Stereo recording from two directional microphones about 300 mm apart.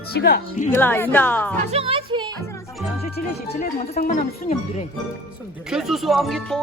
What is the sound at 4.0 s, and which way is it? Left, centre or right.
Speech, left.